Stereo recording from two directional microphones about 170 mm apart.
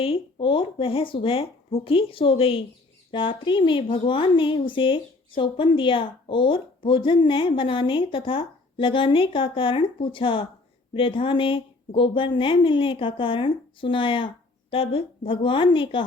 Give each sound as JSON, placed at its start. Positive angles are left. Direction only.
{"t": 0.0, "sound": "a woman's voice", "side_deg": 30}